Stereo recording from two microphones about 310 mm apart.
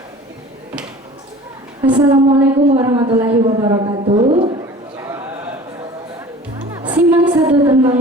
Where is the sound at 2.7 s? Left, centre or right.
Centre.